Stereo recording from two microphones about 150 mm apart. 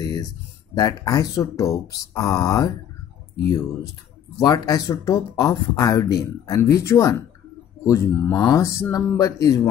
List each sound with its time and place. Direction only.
0.0 s a sound: 25° left (ahead or behind)
0.7 s speech: 25° left (ahead or behind)
4.4 s speech: 25° left (ahead or behind)